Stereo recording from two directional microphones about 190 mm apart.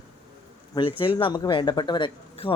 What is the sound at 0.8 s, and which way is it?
Speech, 25° left (ahead or behind).